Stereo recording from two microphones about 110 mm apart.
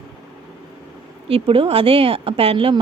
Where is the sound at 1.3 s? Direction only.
55° right (ahead or behind).